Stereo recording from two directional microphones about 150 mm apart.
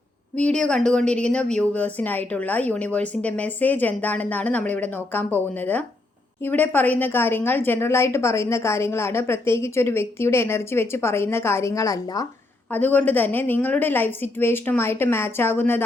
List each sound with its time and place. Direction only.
0.3 s a woman's voice: 5° left (ahead or behind); by 12.3 s 25° left (ahead or behind)
12.7 s a woman's voice: 10° left (ahead or behind)